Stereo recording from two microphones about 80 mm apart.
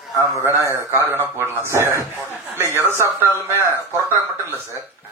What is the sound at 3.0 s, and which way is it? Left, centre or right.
Speech, right.